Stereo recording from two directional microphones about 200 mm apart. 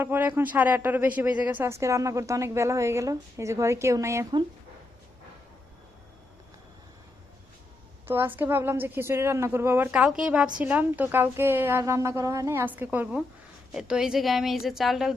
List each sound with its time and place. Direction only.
0.0 s a woman's voice: 10° right (ahead or behind)
8.0 s a woman's voice: 10° right (ahead or behind)